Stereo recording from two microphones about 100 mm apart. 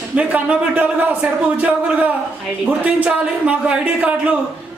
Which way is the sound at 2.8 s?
15° right (ahead or behind).